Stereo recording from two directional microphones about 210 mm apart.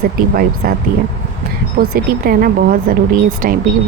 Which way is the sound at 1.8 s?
45° right (ahead or behind).